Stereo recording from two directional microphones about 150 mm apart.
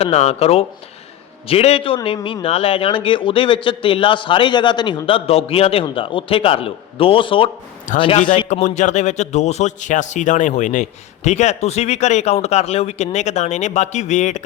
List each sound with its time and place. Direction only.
0.0 s a man's voice: 45° left (ahead or behind)
7.9 s a man's voice: 55° left (ahead or behind)